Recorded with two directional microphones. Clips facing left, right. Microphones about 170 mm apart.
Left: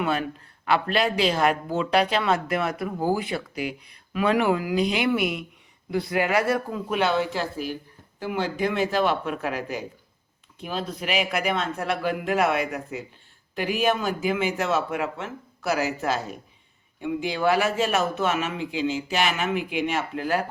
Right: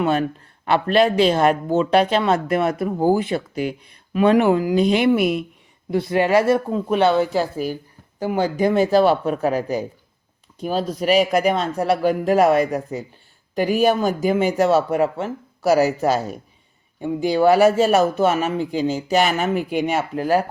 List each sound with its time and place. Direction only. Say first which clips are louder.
0.0 s a man's voice: right 6 dB; 35° right (ahead or behind)